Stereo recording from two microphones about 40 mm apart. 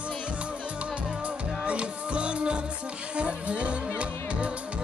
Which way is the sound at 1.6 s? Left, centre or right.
Right.